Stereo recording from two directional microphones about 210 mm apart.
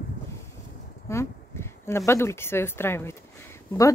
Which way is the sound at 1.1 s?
15° left (ahead or behind).